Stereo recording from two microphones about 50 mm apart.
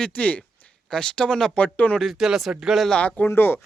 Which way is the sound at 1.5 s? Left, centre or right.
Left.